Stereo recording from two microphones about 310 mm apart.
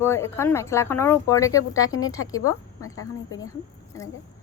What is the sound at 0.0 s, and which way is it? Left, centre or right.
A woman's voice, centre.